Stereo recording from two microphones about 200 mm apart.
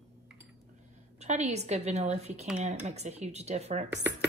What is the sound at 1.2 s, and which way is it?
A woman's voice, 35° right (ahead or behind).